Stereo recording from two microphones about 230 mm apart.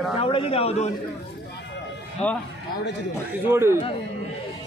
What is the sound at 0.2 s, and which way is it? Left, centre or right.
Speech, left.